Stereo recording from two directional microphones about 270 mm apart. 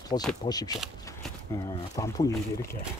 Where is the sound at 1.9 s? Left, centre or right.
Centre.